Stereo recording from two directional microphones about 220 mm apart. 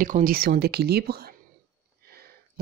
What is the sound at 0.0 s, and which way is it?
Speech, 40° right (ahead or behind).